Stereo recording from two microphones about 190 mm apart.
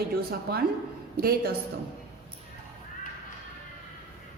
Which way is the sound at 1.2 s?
50° right (ahead or behind).